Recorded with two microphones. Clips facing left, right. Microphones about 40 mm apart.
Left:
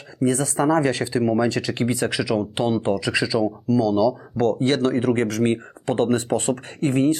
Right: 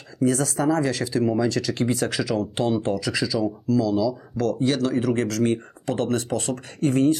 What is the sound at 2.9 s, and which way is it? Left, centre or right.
Speech, left.